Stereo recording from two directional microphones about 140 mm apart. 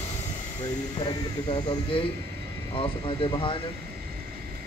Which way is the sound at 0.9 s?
35° left (ahead or behind).